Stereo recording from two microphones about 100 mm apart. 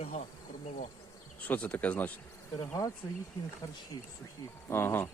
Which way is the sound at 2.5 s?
40° left (ahead or behind).